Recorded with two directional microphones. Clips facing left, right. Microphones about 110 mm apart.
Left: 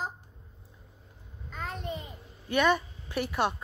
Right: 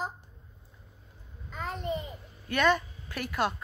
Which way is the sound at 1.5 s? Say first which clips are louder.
Right 3 dB; centre (ahead or behind).